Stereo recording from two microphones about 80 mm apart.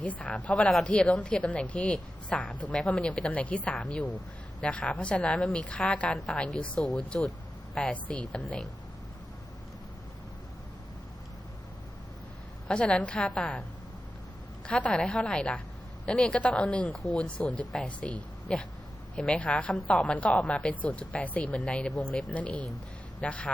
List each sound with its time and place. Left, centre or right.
0.0 s a woman's voice: centre
12.6 s a woman's voice: centre
14.7 s a woman's voice: centre